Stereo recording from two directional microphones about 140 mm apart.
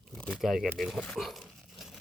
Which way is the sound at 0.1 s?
5° left (ahead or behind).